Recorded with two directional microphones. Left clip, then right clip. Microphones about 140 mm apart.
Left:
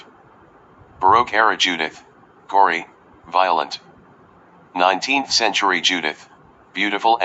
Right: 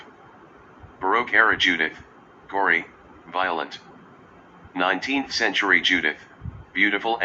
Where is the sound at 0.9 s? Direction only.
25° left (ahead or behind).